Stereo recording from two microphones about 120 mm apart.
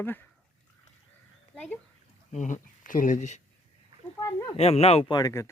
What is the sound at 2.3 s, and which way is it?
Speech, 90° left.